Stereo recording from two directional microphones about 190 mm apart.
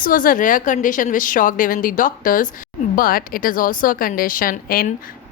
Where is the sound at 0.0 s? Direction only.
50° left (ahead or behind).